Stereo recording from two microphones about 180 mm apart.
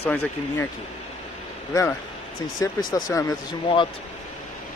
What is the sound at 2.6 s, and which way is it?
Speech, 20° left (ahead or behind).